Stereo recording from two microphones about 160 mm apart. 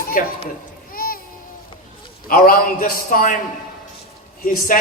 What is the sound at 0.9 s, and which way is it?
Music, 65° left (ahead or behind).